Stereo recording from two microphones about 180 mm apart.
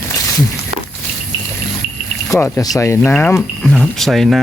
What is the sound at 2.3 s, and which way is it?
Speech, 15° left (ahead or behind).